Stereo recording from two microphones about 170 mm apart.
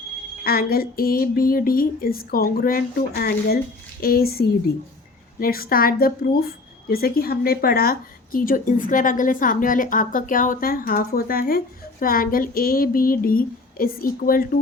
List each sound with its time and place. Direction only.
0.4 s a woman's voice: 60° left (ahead or behind)